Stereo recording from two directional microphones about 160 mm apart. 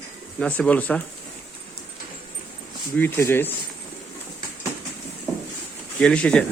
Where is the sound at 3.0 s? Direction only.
15° left (ahead or behind).